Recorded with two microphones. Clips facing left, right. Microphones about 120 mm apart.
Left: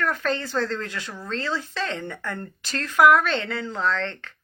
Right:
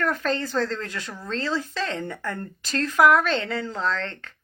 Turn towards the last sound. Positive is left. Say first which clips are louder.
# left 2 dB
turn(degrees=-35)  # may be behind; listen again after turning